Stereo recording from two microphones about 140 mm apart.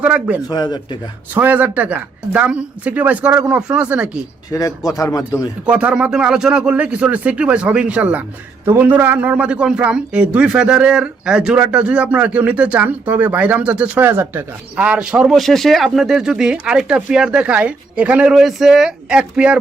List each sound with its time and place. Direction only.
0.0 s a man's voice: 10° right (ahead or behind)
0.4 s speech: 30° left (ahead or behind)
1.3 s a man's voice: 10° right (ahead or behind)
4.5 s speech: 25° left (ahead or behind)
5.6 s a man's voice: 10° right (ahead or behind)